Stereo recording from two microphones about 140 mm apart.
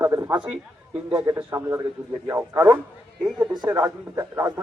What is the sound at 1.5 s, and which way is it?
A man's voice, 25° right (ahead or behind).